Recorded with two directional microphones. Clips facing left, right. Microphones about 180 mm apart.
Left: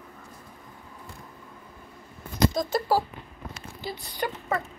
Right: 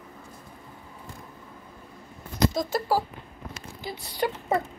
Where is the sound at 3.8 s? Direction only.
20° right (ahead or behind).